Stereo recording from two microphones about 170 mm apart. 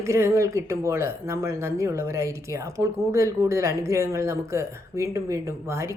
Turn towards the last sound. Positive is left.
turn(degrees=-15)  # may be behind; listen again after turning